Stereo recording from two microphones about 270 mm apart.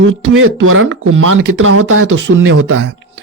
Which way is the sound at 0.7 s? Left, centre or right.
Right.